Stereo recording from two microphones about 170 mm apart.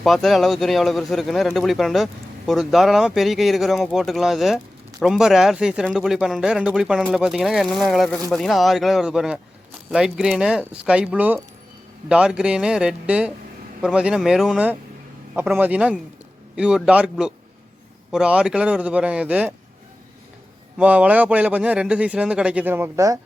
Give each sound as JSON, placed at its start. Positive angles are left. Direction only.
{"t": 0.0, "sound": "a man's voice", "side_deg": 0}
{"t": 20.7, "sound": "a man's voice", "side_deg": -10}